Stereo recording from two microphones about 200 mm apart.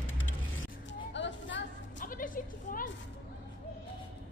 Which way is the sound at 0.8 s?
65° left (ahead or behind).